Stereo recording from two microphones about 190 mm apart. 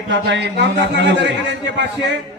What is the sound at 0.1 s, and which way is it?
A man's voice, 65° right (ahead or behind).